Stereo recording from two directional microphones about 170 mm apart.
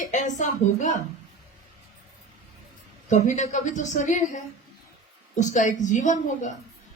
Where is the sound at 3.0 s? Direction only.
45° left (ahead or behind).